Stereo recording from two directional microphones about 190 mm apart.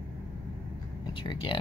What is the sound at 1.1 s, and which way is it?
Speech, 25° left (ahead or behind).